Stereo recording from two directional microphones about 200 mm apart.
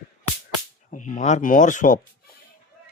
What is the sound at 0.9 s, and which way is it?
Speech, 40° left (ahead or behind).